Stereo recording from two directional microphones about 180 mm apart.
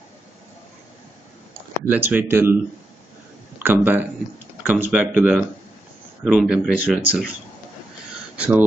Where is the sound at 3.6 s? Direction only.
10° right (ahead or behind).